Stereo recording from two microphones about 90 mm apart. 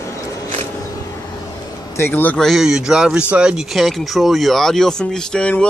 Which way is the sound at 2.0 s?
20° left (ahead or behind).